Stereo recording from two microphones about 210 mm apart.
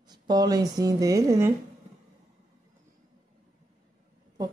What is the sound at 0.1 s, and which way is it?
A woman's voice, 20° right (ahead or behind).